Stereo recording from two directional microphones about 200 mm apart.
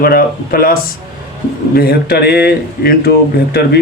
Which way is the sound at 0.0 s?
50° left (ahead or behind).